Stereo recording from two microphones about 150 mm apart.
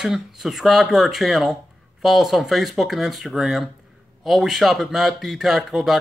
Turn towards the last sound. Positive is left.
turn(degrees=0)  # may be behind; listen again after turning